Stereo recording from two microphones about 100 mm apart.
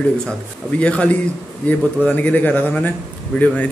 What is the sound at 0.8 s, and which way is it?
A man's voice, 10° left (ahead or behind).